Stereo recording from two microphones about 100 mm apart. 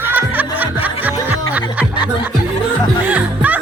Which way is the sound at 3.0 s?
15° right (ahead or behind).